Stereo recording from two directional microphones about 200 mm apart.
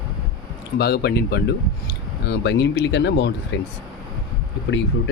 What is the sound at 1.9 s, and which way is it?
Cutlery, 60° left (ahead or behind).